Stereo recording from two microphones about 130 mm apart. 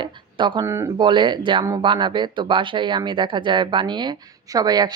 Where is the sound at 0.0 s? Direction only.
35° right (ahead or behind).